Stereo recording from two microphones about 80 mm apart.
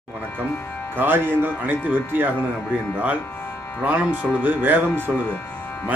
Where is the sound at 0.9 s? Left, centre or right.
Right.